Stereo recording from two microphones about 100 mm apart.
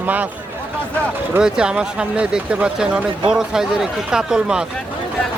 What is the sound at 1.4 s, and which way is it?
Speech, 10° right (ahead or behind).